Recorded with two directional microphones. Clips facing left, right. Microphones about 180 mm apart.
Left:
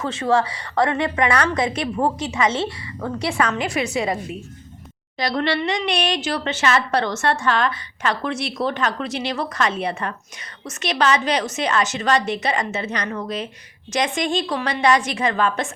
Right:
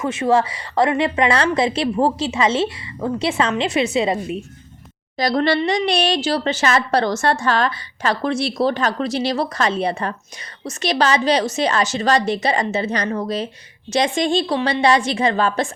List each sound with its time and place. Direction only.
0.0 s a woman's voice: 20° right (ahead or behind)
5.1 s a woman's voice: 40° right (ahead or behind)